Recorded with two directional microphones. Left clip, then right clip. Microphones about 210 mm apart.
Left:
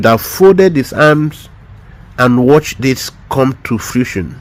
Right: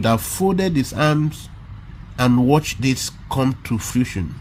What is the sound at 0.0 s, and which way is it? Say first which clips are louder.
Speech: left 12 dB; 25° left (ahead or behind).